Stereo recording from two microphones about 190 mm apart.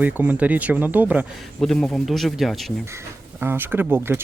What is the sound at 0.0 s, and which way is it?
Speech, 10° right (ahead or behind).